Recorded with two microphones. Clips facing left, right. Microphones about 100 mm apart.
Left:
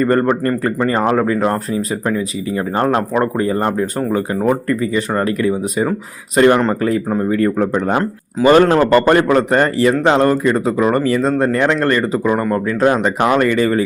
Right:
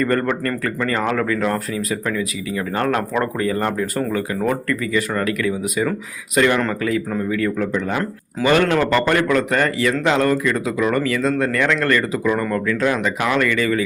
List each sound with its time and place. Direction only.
0.0 s speech: 30° left (ahead or behind)